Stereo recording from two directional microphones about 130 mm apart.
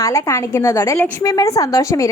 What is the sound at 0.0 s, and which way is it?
A woman's voice, 20° left (ahead or behind).